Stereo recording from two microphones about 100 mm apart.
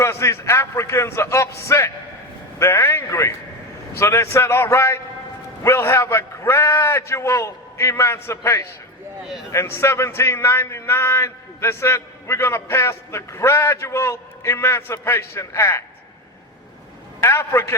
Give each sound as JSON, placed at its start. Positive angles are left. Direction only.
{"t": 0.0, "sound": "a man's voice", "side_deg": 30}
{"t": 17.2, "sound": "a man's voice", "side_deg": 25}